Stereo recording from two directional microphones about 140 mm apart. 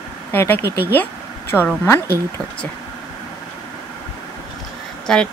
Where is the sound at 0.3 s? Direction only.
15° left (ahead or behind).